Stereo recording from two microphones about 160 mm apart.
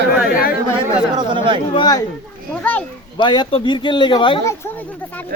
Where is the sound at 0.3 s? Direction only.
65° left (ahead or behind).